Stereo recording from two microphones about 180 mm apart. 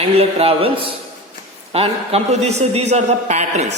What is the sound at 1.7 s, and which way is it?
A man's voice, 35° right (ahead or behind).